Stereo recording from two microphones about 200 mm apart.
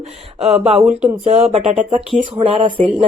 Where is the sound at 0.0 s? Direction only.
30° right (ahead or behind).